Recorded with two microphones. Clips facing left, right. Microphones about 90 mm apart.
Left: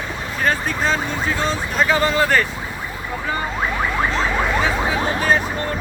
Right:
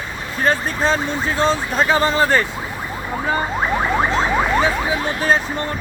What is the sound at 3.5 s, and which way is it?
Rodents, 25° right (ahead or behind).